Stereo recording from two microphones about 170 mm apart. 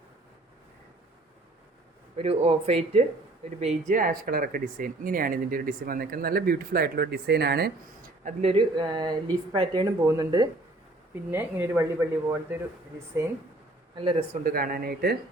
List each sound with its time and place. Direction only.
2.1 s speech: 35° right (ahead or behind); by 7.7 s 70° right (ahead or behind)
8.2 s speech: 40° right (ahead or behind); by 10.5 s 25° right (ahead or behind)
11.3 s speech: 10° right (ahead or behind)
13.9 s speech: 30° right (ahead or behind)
14.4 s speech: 55° right (ahead or behind)